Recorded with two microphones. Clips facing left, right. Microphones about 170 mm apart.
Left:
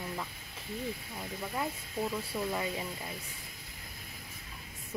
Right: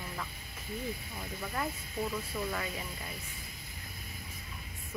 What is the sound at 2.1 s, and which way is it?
Speech, 20° left (ahead or behind).